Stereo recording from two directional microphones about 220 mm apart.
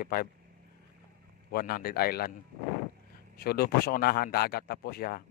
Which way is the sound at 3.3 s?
45° left (ahead or behind).